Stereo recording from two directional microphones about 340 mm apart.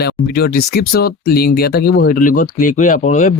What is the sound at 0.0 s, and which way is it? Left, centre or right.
Speech, left.